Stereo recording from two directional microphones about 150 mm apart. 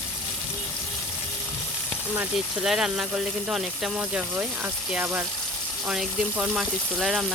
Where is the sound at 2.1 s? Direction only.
10° right (ahead or behind).